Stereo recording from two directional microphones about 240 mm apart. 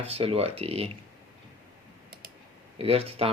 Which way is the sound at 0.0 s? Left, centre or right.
Right.